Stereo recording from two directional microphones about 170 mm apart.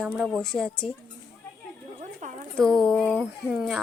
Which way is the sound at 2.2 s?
45° right (ahead or behind).